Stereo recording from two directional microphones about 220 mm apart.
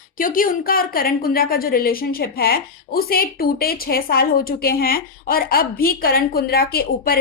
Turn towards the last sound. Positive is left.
turn(degrees=45)  # may be behind; listen again after turning